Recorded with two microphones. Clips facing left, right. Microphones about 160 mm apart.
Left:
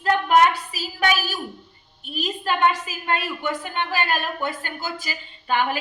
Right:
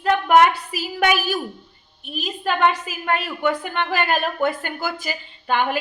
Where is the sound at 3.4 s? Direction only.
55° right (ahead or behind).